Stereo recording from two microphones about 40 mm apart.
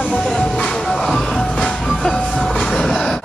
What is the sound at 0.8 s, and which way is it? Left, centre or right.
Music, centre.